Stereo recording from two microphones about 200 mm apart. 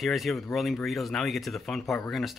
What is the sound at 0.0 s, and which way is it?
Speech, centre (ahead or behind).